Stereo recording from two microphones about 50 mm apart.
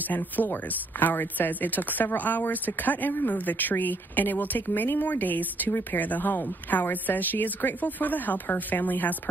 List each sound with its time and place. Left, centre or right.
0.1 s speech: left